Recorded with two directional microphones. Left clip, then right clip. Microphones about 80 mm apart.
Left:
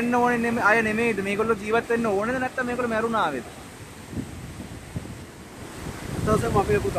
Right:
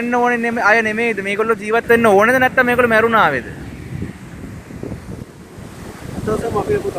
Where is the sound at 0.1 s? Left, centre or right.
Right.